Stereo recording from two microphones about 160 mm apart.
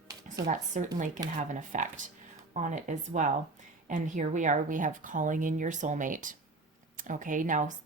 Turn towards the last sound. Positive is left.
turn(degrees=-50)  # may be behind; listen again after turning